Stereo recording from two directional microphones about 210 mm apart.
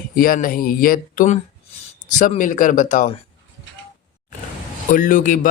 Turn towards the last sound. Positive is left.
turn(degrees=40)  # may be behind; listen again after turning